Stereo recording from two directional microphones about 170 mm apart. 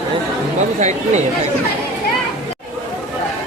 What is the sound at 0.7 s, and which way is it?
Speech, 45° right (ahead or behind).